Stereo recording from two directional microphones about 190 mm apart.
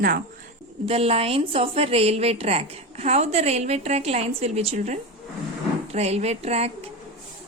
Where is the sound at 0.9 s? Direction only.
30° right (ahead or behind).